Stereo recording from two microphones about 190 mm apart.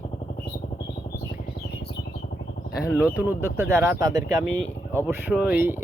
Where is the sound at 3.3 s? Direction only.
10° right (ahead or behind).